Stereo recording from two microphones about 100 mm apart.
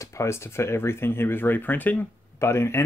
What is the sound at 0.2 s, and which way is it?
Speech, 25° left (ahead or behind).